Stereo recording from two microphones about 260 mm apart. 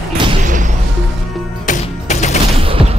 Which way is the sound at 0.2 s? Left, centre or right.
Centre.